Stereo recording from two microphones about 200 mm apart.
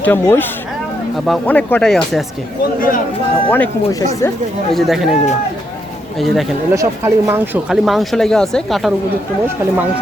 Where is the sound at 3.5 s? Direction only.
10° left (ahead or behind).